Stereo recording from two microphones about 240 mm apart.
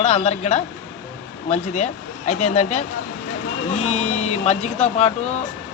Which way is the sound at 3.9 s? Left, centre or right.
Left.